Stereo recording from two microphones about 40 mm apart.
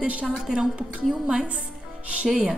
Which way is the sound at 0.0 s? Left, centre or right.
Right.